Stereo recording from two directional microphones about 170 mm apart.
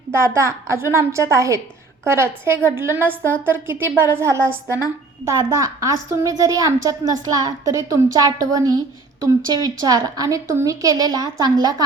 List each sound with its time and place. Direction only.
0.1 s a woman's voice: 15° right (ahead or behind)